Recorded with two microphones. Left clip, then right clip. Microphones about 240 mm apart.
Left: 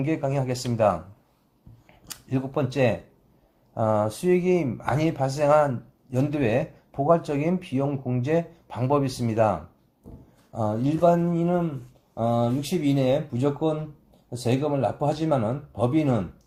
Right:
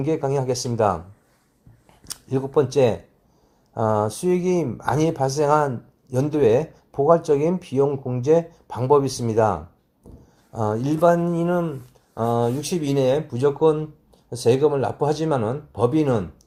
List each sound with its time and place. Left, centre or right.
0.0 s speech: right
2.0 s speech: right